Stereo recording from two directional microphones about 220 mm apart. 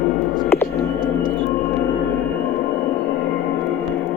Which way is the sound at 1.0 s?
40° left (ahead or behind).